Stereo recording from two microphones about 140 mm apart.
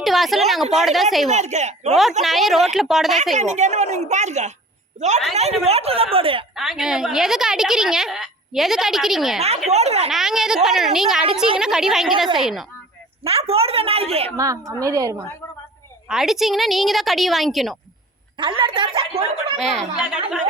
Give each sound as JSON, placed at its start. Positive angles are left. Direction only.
{"t": 0.0, "sound": "a woman's voice", "side_deg": 0}
{"t": 1.3, "sound": "speech", "side_deg": -55}
{"t": 2.2, "sound": "a woman's voice", "side_deg": 0}
{"t": 3.3, "sound": "a woman's voice", "side_deg": -55}
{"t": 6.6, "sound": "a woman's voice", "side_deg": -5}
{"t": 9.6, "sound": "a sound", "side_deg": -50}
{"t": 10.1, "sound": "a woman's voice", "side_deg": 0}
{"t": 13.2, "sound": "speech", "side_deg": -45}
{"t": 14.3, "sound": "a woman's voice", "side_deg": -25}
{"t": 16.0, "sound": "a woman's voice", "side_deg": -5}
{"t": 18.3, "sound": "a woman's voice", "side_deg": -35}
{"t": 19.5, "sound": "a woman's voice", "side_deg": 0}